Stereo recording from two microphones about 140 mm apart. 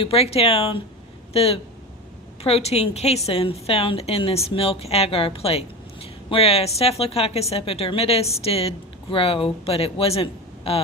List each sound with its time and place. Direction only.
0.0 s a woman's voice: 45° left (ahead or behind)